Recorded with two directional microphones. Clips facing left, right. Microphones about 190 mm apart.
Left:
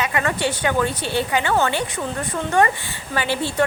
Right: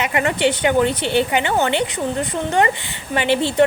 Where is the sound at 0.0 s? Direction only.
20° right (ahead or behind).